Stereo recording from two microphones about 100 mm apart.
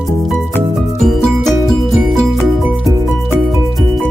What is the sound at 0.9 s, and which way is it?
Music, 5° left (ahead or behind).